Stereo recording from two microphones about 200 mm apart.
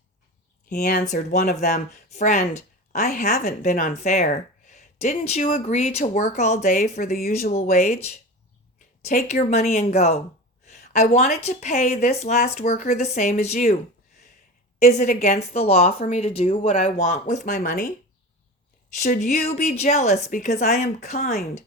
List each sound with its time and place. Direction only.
0.7 s speech: 45° left (ahead or behind)
10.7 s a sound: 35° left (ahead or behind)
11.4 s speech: 35° left (ahead or behind)
14.8 s speech: 35° left (ahead or behind)
18.9 s speech: 40° left (ahead or behind)